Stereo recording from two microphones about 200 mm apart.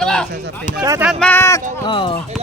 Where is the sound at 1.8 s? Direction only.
25° left (ahead or behind).